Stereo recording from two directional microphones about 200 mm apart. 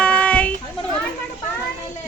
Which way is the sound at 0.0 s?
5° left (ahead or behind).